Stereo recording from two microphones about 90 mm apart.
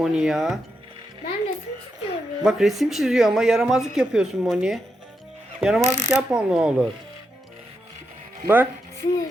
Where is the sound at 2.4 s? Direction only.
5° right (ahead or behind).